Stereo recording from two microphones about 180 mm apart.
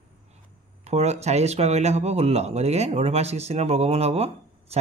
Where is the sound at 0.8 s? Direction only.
40° right (ahead or behind).